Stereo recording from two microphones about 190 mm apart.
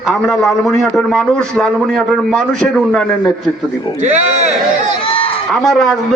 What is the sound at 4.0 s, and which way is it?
Speech, 35° right (ahead or behind).